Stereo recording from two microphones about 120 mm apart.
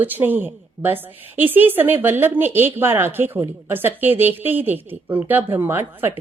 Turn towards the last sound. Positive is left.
turn(degrees=-20)  # may be behind; listen again after turning